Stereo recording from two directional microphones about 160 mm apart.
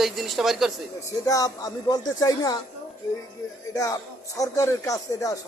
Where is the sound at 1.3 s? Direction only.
20° left (ahead or behind).